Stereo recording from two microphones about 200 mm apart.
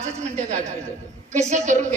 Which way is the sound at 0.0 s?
35° right (ahead or behind).